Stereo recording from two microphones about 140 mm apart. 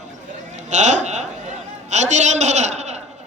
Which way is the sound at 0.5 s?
55° right (ahead or behind).